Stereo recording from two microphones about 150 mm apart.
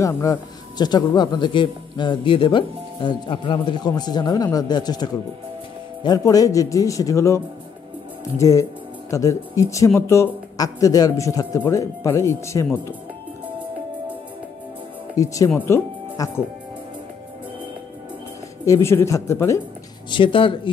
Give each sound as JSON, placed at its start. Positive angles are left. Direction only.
{"t": 0.0, "sound": "speech", "side_deg": 25}
{"t": 15.1, "sound": "speech", "side_deg": 20}
{"t": 18.7, "sound": "speech", "side_deg": 20}
{"t": 20.1, "sound": "speech", "side_deg": 35}